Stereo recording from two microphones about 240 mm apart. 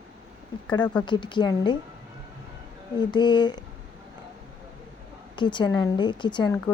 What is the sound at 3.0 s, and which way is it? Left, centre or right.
Speech, centre.